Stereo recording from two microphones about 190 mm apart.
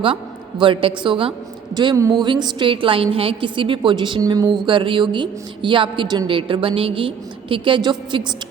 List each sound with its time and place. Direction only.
0.6 s a woman's voice: 25° right (ahead or behind)